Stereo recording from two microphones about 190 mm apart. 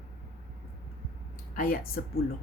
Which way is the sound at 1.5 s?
50° left (ahead or behind).